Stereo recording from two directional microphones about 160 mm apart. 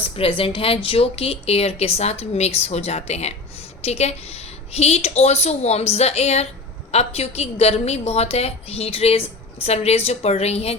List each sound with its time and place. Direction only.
0.0 s speech: 35° left (ahead or behind)